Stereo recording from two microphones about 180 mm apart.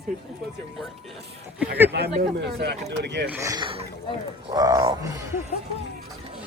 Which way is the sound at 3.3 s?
20° right (ahead or behind).